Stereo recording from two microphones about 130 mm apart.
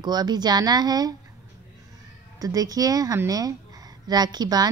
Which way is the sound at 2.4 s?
30° right (ahead or behind).